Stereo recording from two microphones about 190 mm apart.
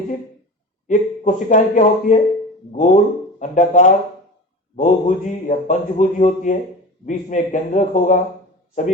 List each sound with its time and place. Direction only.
0.9 s speech: 40° left (ahead or behind)